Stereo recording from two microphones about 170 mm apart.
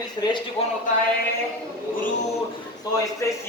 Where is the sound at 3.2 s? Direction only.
15° left (ahead or behind).